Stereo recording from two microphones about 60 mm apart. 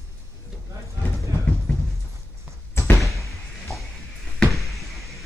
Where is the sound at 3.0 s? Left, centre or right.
Centre.